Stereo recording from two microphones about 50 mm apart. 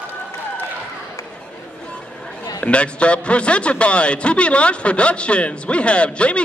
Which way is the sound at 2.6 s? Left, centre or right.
Left.